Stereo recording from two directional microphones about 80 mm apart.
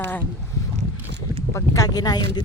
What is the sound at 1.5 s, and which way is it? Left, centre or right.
Speech, left.